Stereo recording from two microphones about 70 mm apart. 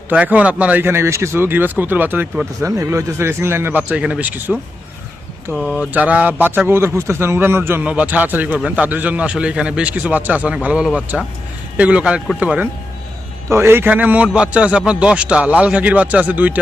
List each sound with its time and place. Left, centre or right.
0.1 s a man's voice: right
0.9 s a man's voice: right
2.6 s speech: right
5.6 s speech: left
5.9 s a man's voice: right
6.7 s speech: right
7.9 s a man's voice: centre
13.5 s speech: right
13.8 s a man's voice: right